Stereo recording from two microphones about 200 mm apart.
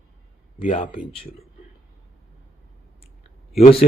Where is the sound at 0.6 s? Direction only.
25° left (ahead or behind).